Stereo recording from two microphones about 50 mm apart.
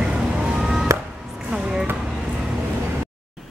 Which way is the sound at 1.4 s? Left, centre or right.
Centre.